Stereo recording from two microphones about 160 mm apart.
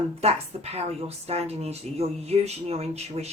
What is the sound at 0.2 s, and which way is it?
A woman's voice, 40° right (ahead or behind).